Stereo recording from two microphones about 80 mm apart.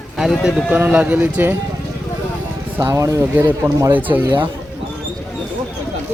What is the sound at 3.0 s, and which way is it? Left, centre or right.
Speech, right.